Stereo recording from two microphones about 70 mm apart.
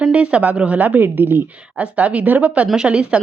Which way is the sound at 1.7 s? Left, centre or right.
Centre.